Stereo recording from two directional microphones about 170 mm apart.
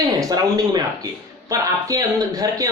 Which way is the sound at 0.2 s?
20° right (ahead or behind).